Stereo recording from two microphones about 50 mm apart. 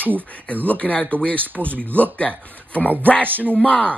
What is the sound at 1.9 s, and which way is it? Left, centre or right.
Speech, left.